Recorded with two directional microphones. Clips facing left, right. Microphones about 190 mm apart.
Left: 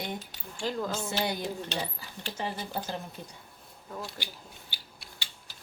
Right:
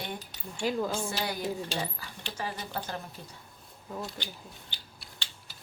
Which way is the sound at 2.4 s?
25° left (ahead or behind).